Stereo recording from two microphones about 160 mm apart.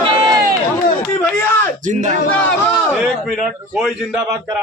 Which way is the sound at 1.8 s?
50° right (ahead or behind).